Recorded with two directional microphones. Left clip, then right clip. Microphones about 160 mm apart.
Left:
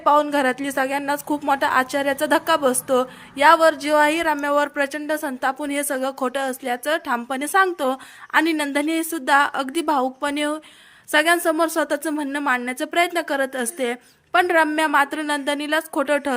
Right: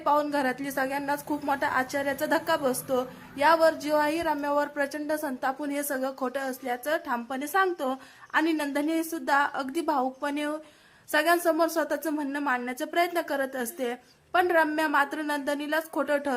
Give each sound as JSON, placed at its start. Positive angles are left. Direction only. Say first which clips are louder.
{"t": 0.0, "sound": "a woman's voice", "louder": "left 8 dB", "side_deg": 25}